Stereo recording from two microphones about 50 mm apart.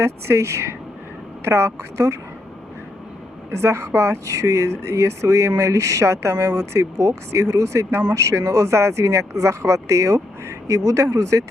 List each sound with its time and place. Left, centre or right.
0.0 s speech: right
3.6 s speech: right